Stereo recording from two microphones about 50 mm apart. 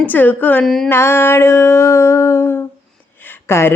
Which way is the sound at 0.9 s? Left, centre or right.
Left.